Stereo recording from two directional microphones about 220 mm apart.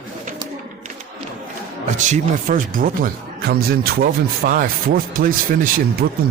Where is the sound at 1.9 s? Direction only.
35° right (ahead or behind).